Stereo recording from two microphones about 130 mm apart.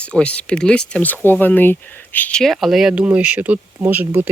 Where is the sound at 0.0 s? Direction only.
10° left (ahead or behind).